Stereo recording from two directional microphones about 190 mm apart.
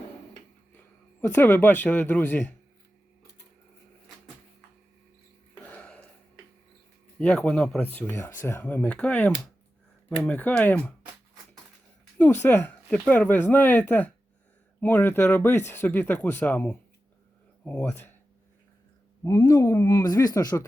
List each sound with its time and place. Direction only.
1.4 s speech: 10° left (ahead or behind)
5.6 s burping: 5° left (ahead or behind)
7.2 s speech: 5° left (ahead or behind)
12.1 s speech: 10° left (ahead or behind)
19.2 s speech: 15° left (ahead or behind)